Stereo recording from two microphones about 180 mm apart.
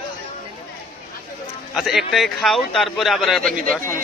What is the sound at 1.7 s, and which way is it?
Speech, 5° right (ahead or behind).